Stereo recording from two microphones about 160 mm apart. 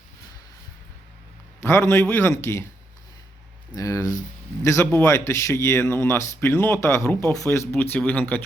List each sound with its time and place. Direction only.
1.6 s speech: 15° left (ahead or behind)
3.7 s speech: 20° left (ahead or behind)